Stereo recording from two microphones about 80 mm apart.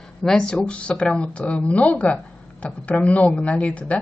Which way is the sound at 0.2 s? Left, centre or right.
Centre.